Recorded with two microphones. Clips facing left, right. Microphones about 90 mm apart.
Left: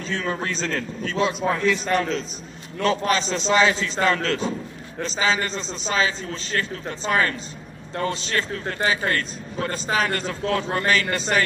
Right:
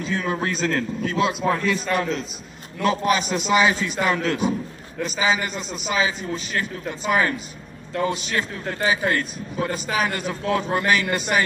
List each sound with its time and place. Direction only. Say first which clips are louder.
0.0 s a man's voice: right 2 dB; 5° right (ahead or behind)